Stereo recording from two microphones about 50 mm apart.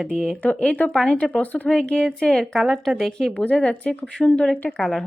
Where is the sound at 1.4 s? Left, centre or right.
Left.